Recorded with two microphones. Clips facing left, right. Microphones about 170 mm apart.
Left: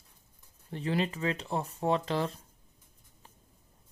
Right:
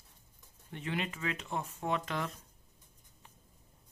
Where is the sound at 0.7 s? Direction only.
35° left (ahead or behind).